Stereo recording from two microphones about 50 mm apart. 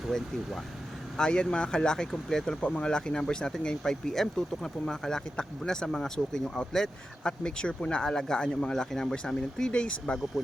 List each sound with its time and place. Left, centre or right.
1.1 s speech: centre